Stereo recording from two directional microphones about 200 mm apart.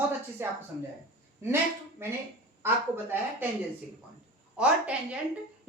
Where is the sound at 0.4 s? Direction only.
10° right (ahead or behind).